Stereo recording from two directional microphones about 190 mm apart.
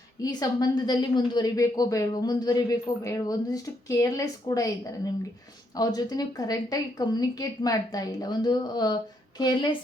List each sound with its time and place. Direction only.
0.2 s a woman's voice: 20° left (ahead or behind)